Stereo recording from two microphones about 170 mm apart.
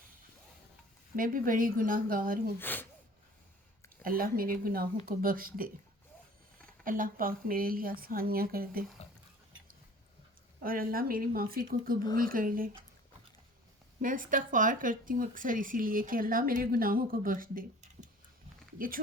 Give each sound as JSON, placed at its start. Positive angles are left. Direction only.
{"t": 1.1, "sound": "a woman's voice", "side_deg": -55}
{"t": 2.6, "sound": "speech", "side_deg": 10}
{"t": 4.0, "sound": "a woman's voice", "side_deg": -55}
{"t": 6.8, "sound": "a woman's voice", "side_deg": -55}
{"t": 10.6, "sound": "a woman's voice", "side_deg": -60}
{"t": 14.0, "sound": "speech", "side_deg": -50}